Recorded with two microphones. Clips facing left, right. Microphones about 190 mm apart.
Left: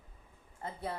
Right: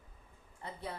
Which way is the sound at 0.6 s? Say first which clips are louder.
Left 3 dB; 45° left (ahead or behind).